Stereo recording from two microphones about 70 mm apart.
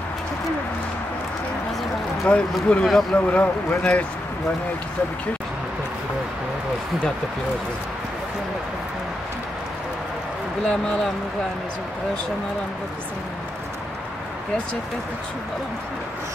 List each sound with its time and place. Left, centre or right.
2.2 s speech: centre
2.8 s speech: centre
3.3 s speech: centre
10.7 s speech: centre